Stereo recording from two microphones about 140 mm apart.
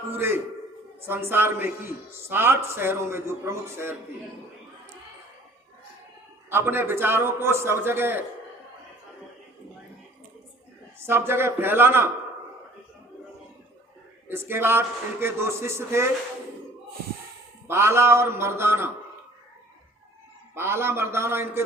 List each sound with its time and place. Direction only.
0.1 s a man's voice: 15° right (ahead or behind)
6.5 s a man's voice: 15° right (ahead or behind)
11.0 s a man's voice: 15° right (ahead or behind)
14.3 s a man's voice: 15° right (ahead or behind)
17.7 s a man's voice: 20° right (ahead or behind)
20.6 s a man's voice: 15° right (ahead or behind)